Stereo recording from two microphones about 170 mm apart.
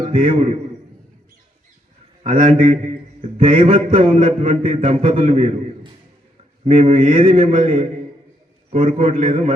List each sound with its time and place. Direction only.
0.1 s a man's voice: 40° right (ahead or behind)
2.4 s a man's voice: 45° right (ahead or behind)